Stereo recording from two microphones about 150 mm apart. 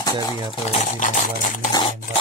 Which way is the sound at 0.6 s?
55° left (ahead or behind).